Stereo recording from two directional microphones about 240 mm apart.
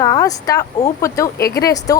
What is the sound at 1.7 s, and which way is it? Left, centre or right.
Speech, centre.